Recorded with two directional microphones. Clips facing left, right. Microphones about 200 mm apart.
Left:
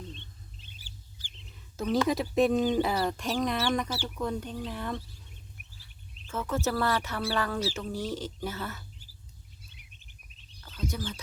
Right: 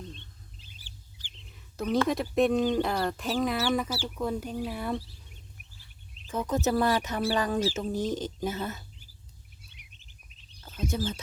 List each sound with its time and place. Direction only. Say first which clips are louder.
1.7 s speech: even; centre (ahead or behind)
6.2 s speech: right 3 dB; 15° right (ahead or behind)
10.8 s speech: right 4 dB; 25° right (ahead or behind)